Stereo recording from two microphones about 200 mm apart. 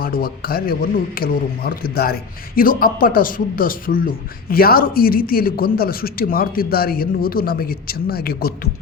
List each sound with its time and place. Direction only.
0.0 s a man's voice: 45° left (ahead or behind)